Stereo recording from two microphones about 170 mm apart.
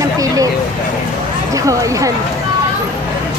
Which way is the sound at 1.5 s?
20° right (ahead or behind).